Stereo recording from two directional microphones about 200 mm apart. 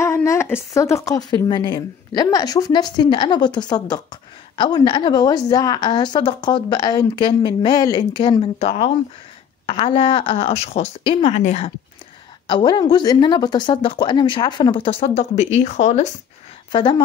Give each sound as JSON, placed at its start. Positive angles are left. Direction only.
{"t": 0.0, "sound": "a woman's voice", "side_deg": 15}
{"t": 16.7, "sound": "a woman's voice", "side_deg": 25}